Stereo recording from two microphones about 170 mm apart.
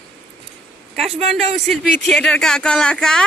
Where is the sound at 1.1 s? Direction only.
40° right (ahead or behind).